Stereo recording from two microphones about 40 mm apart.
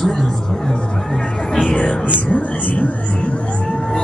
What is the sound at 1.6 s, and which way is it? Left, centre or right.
Music, left.